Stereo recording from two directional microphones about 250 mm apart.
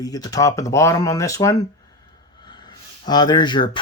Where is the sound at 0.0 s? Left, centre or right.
Centre.